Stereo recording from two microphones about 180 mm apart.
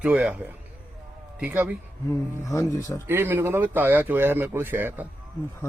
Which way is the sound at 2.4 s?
15° left (ahead or behind).